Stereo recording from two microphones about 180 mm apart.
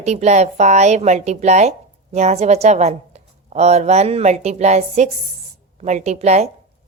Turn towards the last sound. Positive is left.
turn(degrees=-40)  # may be behind; listen again after turning